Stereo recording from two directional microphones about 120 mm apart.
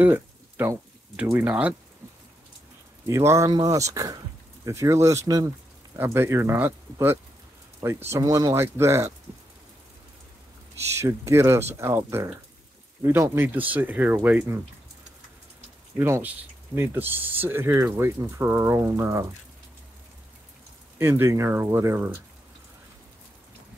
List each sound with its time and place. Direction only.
0.0 s a sound: 15° right (ahead or behind)
1.3 s speech: 10° right (ahead or behind)
3.1 s speech: 25° right (ahead or behind)
8.1 s speech: 30° right (ahead or behind)
11.0 s speech: 20° right (ahead or behind)
16.0 s speech: 15° right (ahead or behind)
21.0 s speech: 20° right (ahead or behind)